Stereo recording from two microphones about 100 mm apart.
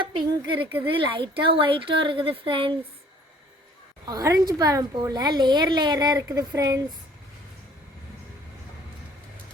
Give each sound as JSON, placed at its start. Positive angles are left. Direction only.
{"t": 0.0, "sound": "speech", "side_deg": -55}
{"t": 4.0, "sound": "a woman's voice", "side_deg": -40}